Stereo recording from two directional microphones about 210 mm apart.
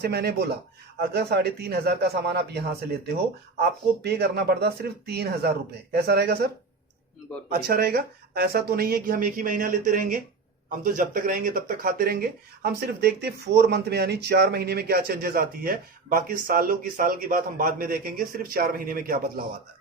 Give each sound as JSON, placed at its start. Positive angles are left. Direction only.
{"t": 0.0, "sound": "speech", "side_deg": -50}
{"t": 7.5, "sound": "speech", "side_deg": -45}